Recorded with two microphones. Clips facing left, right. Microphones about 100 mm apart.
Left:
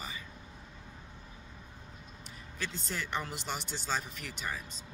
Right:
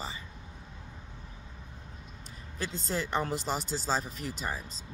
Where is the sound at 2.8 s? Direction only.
35° right (ahead or behind).